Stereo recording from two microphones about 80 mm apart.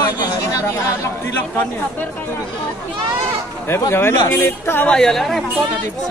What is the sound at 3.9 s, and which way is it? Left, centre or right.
Speech, left.